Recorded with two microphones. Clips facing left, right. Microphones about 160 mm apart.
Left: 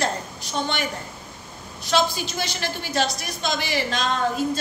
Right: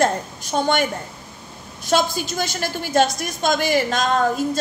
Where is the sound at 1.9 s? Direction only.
45° right (ahead or behind).